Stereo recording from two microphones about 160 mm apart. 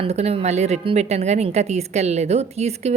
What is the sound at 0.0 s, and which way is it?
A woman's voice, 40° right (ahead or behind).